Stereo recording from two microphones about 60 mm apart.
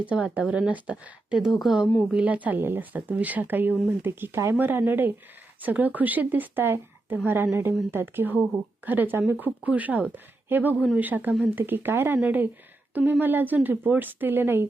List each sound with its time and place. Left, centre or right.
0.0 s speech: right
1.5 s speech: centre
2.1 s speech: right
2.6 s a woman's voice: right